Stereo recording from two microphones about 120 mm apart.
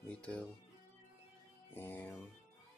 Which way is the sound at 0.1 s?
10° left (ahead or behind).